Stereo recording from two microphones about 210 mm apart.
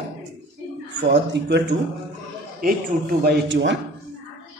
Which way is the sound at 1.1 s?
55° right (ahead or behind).